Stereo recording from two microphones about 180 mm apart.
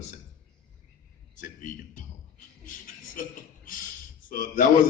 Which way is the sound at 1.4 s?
45° left (ahead or behind).